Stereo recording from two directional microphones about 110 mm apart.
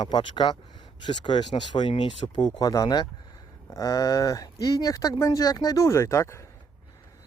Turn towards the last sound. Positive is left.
turn(degrees=25)  # may be behind; listen again after turning